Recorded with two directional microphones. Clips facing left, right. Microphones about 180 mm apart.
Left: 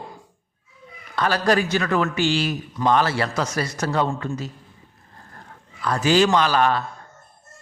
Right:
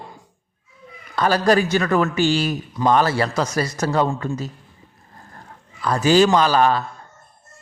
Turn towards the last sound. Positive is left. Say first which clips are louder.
# right 2 dB
turn(degrees=-35)  # may be behind; listen again after turning